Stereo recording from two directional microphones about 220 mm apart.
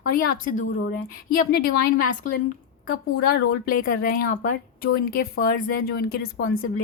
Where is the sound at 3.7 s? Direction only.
40° left (ahead or behind).